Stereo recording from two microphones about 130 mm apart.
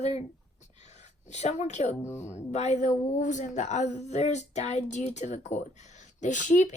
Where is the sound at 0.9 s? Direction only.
60° left (ahead or behind).